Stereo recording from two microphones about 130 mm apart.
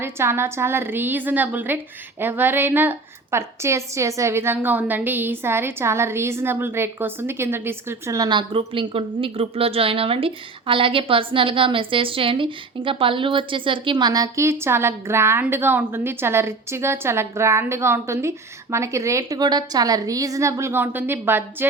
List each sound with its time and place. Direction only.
0.0 s a woman's voice: 20° right (ahead or behind)